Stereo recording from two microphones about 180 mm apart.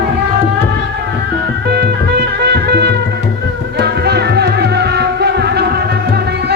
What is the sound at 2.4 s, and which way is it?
Music, 65° right (ahead or behind).